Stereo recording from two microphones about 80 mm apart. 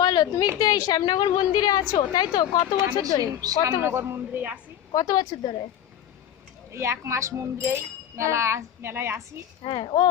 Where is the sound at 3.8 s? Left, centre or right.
Right.